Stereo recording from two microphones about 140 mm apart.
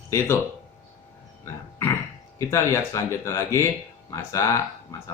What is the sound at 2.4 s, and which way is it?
Speech, 20° left (ahead or behind).